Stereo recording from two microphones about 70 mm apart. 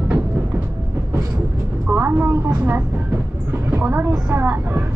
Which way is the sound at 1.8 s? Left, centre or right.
Right.